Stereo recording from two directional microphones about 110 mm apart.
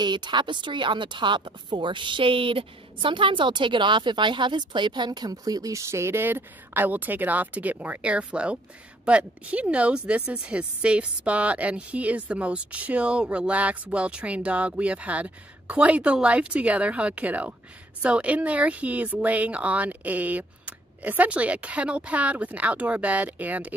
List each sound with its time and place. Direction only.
0.0 s a woman's voice: 45° right (ahead or behind); by 23.7 s 15° right (ahead or behind)